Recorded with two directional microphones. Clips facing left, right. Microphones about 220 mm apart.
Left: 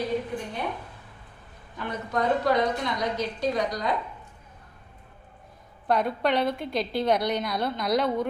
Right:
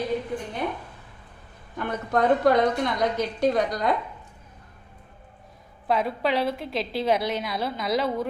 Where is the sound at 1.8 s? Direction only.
50° right (ahead or behind).